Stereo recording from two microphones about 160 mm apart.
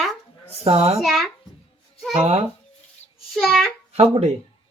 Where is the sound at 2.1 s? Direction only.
40° right (ahead or behind).